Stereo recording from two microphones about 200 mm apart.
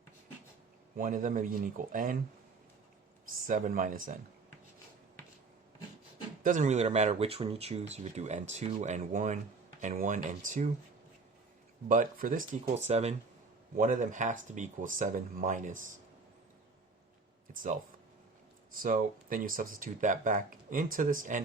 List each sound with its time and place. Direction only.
0.9 s speech: 40° right (ahead or behind)
3.4 s speech: 45° right (ahead or behind)
6.4 s speech: 40° right (ahead or behind)
11.9 s speech: 40° right (ahead or behind)
17.5 s speech: 40° right (ahead or behind)